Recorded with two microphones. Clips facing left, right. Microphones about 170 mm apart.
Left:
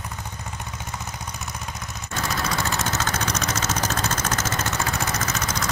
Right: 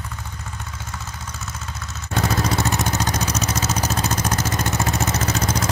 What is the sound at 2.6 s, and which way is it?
Vehicle, 20° right (ahead or behind).